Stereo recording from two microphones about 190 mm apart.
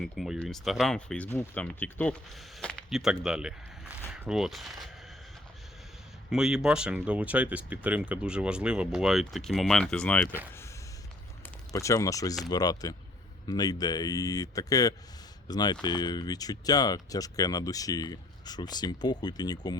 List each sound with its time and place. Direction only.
0.0 s speech: centre (ahead or behind)
6.3 s speech: 5° right (ahead or behind)
11.7 s speech: 20° left (ahead or behind)